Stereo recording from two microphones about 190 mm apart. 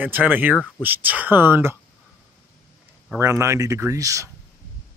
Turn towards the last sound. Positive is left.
turn(degrees=-15)  # may be behind; listen again after turning